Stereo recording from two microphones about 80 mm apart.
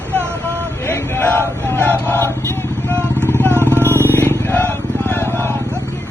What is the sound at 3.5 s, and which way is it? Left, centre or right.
Vehicle, right.